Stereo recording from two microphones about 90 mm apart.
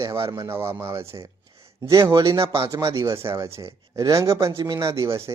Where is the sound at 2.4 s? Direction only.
35° right (ahead or behind).